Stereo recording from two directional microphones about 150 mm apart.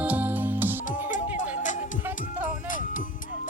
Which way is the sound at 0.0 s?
10° right (ahead or behind).